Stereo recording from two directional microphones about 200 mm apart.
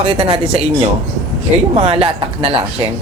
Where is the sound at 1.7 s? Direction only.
30° right (ahead or behind).